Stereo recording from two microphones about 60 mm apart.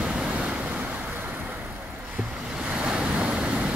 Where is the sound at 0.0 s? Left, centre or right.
Centre.